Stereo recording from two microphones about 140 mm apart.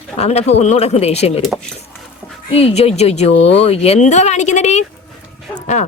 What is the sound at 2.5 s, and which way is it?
Speech, 45° left (ahead or behind).